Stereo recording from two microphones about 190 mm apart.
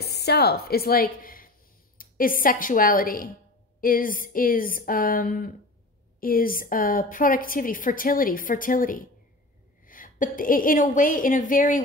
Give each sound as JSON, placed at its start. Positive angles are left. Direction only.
{"t": 0.0, "sound": "a woman's voice", "side_deg": 60}